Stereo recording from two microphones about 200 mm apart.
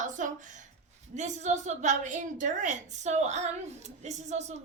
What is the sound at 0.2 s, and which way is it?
A woman's voice, 40° right (ahead or behind).